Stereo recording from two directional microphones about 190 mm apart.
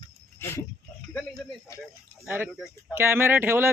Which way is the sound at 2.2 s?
10° right (ahead or behind).